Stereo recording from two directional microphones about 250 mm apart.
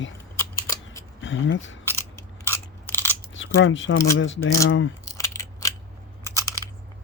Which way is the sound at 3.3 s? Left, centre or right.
Left.